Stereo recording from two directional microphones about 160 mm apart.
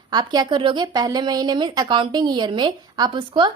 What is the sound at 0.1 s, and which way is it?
A woman's voice, 25° right (ahead or behind).